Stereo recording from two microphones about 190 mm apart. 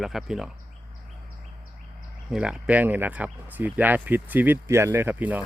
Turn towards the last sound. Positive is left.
turn(degrees=-10)  # may be behind; listen again after turning